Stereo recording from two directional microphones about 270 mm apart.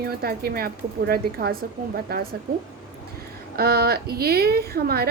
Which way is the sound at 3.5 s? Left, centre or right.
Right.